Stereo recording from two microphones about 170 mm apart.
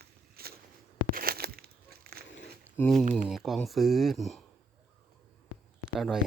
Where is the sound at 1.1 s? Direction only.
60° right (ahead or behind).